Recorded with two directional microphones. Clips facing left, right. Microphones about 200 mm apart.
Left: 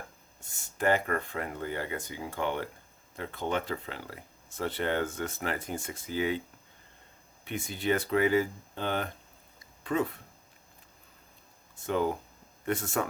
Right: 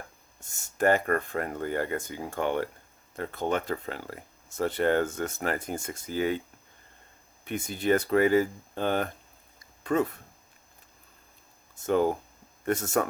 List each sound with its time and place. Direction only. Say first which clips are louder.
0.4 s speech: right 4 dB; 45° right (ahead or behind)
7.4 s speech: right 3 dB; 45° right (ahead or behind)
11.7 s speech: right 4 dB; 45° right (ahead or behind)